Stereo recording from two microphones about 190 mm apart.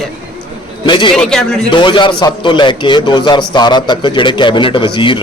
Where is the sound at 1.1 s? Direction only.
5° left (ahead or behind).